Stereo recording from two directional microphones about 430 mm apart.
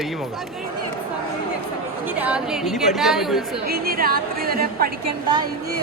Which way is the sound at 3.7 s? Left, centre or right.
Right.